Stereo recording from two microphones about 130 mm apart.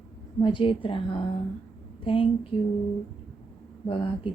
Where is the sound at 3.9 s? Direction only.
40° left (ahead or behind).